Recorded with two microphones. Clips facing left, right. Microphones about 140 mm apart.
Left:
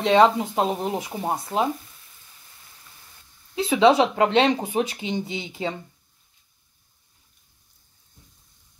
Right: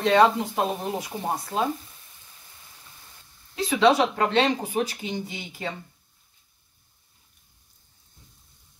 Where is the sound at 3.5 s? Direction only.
25° left (ahead or behind).